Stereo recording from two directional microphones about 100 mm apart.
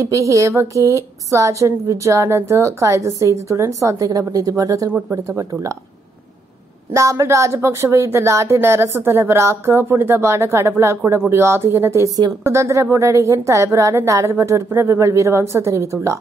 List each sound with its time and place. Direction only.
0.0 s a woman's voice: 30° right (ahead or behind)
6.9 s a woman's voice: 30° right (ahead or behind)